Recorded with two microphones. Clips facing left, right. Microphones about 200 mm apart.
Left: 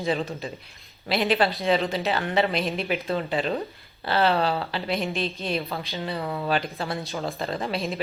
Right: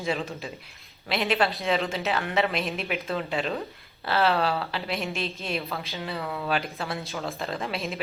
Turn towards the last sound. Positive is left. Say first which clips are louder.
# left 3 dB
turn(degrees=0)  # may be behind; listen again after turning